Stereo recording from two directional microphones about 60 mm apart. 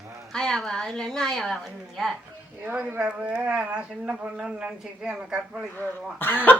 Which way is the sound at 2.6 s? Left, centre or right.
Right.